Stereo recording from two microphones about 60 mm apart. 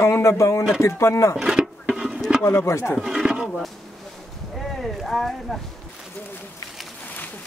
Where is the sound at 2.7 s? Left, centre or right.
Left.